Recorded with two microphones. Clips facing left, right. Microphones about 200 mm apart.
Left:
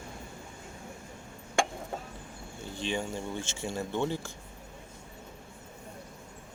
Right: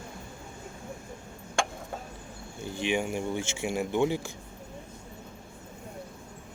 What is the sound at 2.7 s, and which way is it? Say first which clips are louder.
Speech: right 5 dB; 10° right (ahead or behind).